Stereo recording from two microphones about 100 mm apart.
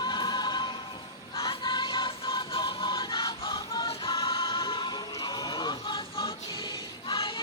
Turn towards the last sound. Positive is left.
turn(degrees=55)  # may be behind; listen again after turning